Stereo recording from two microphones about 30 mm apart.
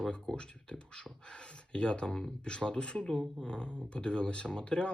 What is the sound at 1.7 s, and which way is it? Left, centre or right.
Speech, left.